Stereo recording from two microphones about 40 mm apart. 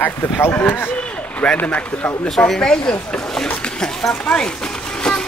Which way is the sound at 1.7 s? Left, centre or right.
Left.